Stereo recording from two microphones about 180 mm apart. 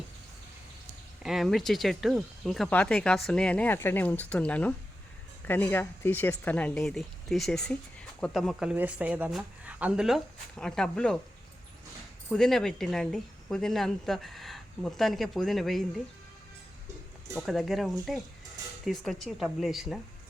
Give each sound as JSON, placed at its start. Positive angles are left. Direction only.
{"t": 1.2, "sound": "speech", "side_deg": 0}
{"t": 12.3, "sound": "speech", "side_deg": 0}
{"t": 17.3, "sound": "speech", "side_deg": 0}